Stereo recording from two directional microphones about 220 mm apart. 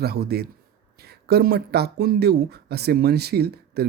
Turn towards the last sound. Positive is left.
turn(degrees=-45)  # may be behind; listen again after turning